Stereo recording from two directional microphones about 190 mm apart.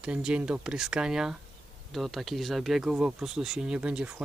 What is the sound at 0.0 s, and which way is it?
Speech, 5° right (ahead or behind).